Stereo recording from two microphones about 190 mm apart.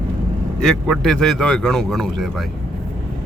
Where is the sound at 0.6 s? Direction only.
Centre (ahead or behind).